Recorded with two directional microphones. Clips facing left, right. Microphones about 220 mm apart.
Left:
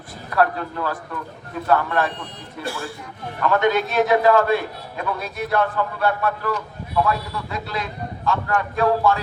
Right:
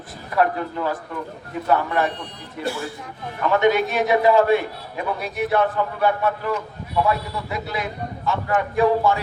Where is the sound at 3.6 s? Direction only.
15° right (ahead or behind).